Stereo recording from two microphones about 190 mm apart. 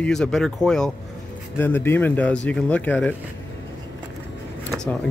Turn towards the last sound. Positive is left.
turn(degrees=5)  # may be behind; listen again after turning